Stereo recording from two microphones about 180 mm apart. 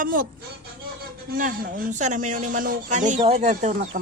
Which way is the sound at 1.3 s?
50° right (ahead or behind).